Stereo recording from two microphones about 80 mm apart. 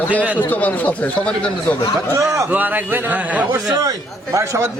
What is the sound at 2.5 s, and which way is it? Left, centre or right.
Speech, right.